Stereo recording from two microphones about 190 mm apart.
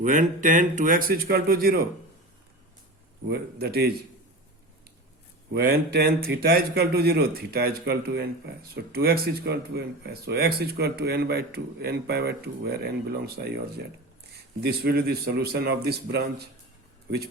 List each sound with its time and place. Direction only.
0.0 s speech: 45° right (ahead or behind)
3.2 s speech: 55° right (ahead or behind)
5.5 s speech: 55° right (ahead or behind)